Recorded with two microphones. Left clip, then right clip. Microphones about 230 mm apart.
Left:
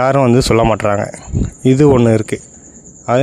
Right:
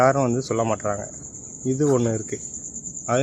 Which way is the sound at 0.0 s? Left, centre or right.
Left.